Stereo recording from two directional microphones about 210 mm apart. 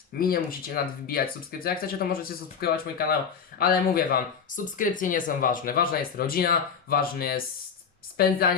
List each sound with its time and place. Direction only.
0.2 s speech: 45° left (ahead or behind)